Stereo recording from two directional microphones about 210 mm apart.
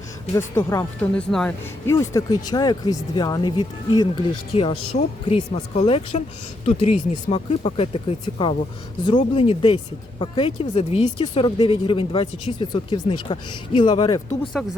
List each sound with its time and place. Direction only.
0.3 s speech: 10° left (ahead or behind)
1.9 s speech: 15° left (ahead or behind)